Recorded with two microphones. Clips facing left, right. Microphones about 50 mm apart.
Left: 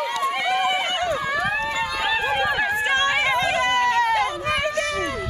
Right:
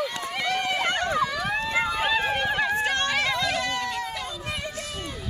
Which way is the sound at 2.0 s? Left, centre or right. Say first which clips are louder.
Left 3 dB; centre.